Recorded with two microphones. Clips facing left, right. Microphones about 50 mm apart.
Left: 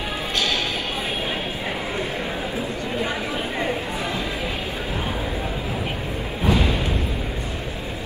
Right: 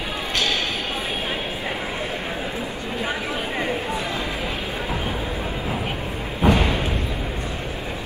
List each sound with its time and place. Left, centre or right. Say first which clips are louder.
6.4 s thump: right 2 dB; right